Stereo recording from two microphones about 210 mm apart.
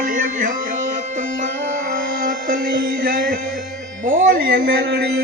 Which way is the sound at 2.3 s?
40° right (ahead or behind).